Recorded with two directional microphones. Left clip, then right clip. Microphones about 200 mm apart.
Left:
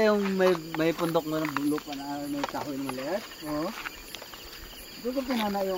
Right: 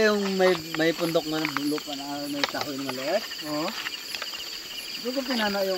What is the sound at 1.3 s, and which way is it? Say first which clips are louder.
Speech: right 2 dB; 10° left (ahead or behind).